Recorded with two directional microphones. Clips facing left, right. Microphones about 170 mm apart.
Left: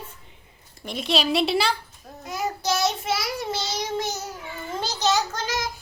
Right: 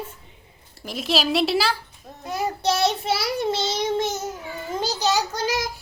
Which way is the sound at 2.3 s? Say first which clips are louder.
Right 3 dB; 30° right (ahead or behind).